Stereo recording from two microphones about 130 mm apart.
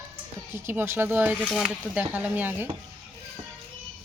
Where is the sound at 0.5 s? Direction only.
20° right (ahead or behind).